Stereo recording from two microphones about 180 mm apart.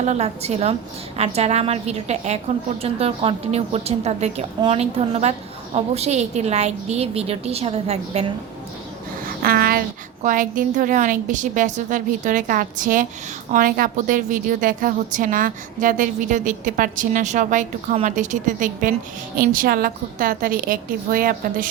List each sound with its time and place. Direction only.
0.0 s a woman's voice: 35° right (ahead or behind)
9.2 s a woman's voice: 55° right (ahead or behind)